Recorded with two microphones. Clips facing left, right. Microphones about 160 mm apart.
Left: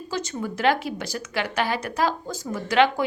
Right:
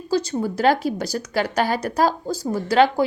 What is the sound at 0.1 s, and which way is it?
A woman's voice, 35° right (ahead or behind).